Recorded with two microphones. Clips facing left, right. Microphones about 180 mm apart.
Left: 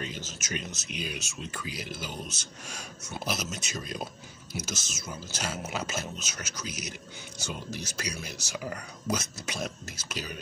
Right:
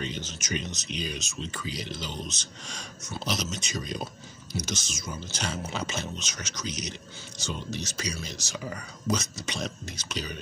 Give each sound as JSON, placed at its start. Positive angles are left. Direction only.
{"t": 0.0, "sound": "speech", "side_deg": 5}